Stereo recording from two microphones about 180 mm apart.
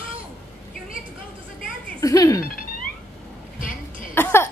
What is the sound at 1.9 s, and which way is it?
Music, 20° left (ahead or behind).